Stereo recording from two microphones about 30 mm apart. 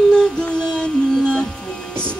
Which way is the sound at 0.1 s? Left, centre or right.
Left.